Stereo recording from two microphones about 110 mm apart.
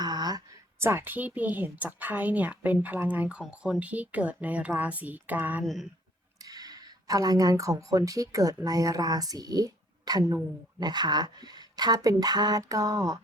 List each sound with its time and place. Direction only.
0.0 s a sound: 40° right (ahead or behind)
0.8 s a woman's voice: 20° right (ahead or behind)
5.6 s speech: centre (ahead or behind)
6.4 s speech: 35° right (ahead or behind)